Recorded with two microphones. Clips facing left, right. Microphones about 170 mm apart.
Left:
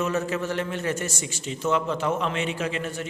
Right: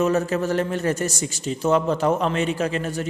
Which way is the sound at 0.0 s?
40° right (ahead or behind).